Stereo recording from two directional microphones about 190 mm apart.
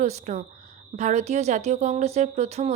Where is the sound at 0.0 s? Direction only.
35° right (ahead or behind).